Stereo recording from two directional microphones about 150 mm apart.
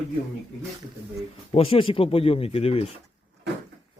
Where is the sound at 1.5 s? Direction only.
40° left (ahead or behind).